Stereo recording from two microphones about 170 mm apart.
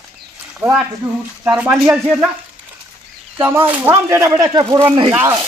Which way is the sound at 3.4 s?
15° right (ahead or behind).